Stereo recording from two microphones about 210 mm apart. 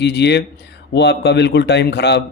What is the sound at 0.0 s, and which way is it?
Speech, 55° left (ahead or behind).